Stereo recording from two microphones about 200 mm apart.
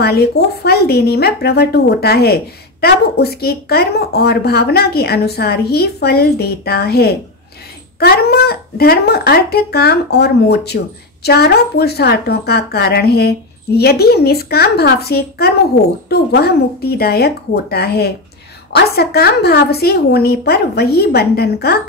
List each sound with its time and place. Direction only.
0.0 s speech: 55° left (ahead or behind)